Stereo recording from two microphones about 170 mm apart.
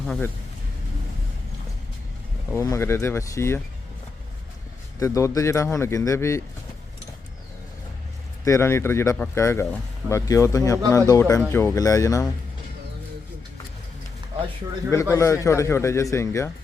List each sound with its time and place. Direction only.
2.5 s speech: 15° left (ahead or behind)
4.9 s speech: 20° left (ahead or behind)
8.4 s speech: 15° left (ahead or behind)
15.1 s speech: 15° left (ahead or behind)